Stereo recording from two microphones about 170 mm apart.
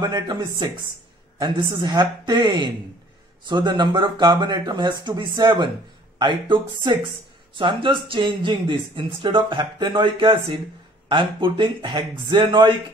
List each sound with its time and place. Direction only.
0.0 s speech: 25° right (ahead or behind)